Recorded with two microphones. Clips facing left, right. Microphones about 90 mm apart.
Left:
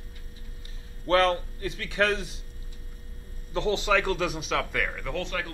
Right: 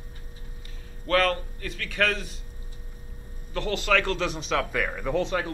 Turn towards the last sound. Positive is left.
turn(degrees=-20)  # may be behind; listen again after turning